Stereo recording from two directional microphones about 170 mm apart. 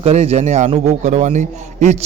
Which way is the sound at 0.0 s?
40° right (ahead or behind).